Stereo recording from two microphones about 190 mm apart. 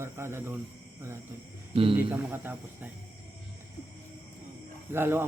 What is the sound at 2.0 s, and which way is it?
Speech, 10° right (ahead or behind).